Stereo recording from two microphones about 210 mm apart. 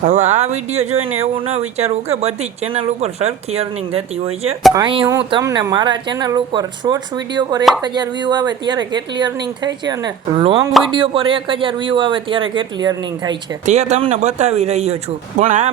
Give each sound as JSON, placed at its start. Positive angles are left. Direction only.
{"t": 0.0, "sound": "speech", "side_deg": -35}
{"t": 13.7, "sound": "speech", "side_deg": -30}